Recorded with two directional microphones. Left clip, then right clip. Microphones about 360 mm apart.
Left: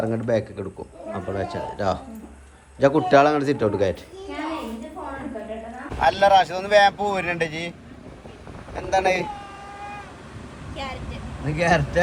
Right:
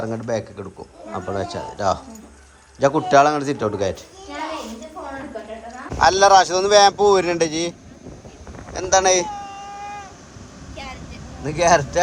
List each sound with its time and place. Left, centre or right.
0.0 s a man's voice: centre
6.0 s speech: centre
8.7 s speech: centre
11.4 s speech: centre